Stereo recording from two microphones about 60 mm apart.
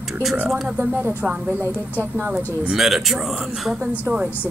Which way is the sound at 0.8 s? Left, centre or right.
Right.